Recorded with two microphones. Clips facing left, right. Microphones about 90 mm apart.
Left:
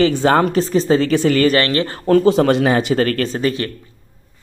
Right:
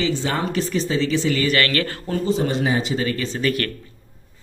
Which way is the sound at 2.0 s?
70° left (ahead or behind).